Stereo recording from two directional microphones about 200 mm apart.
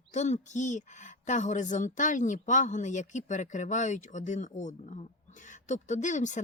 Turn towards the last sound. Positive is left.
turn(degrees=40)  # may be behind; listen again after turning